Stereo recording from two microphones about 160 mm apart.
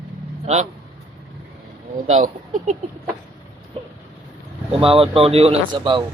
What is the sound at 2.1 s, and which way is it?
Speech, 55° right (ahead or behind).